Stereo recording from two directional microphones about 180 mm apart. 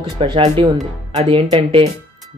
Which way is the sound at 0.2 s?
25° right (ahead or behind).